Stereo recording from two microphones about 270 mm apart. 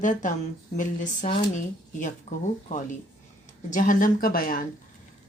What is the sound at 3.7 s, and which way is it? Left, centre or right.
Speech, left.